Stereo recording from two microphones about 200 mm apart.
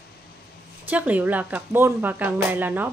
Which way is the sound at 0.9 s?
10° right (ahead or behind).